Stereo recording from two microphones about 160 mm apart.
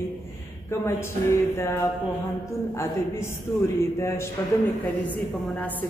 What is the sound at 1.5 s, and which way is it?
A man's voice, 15° left (ahead or behind).